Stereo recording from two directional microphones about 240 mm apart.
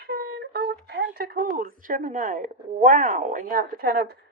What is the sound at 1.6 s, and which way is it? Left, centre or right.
A woman's voice, right.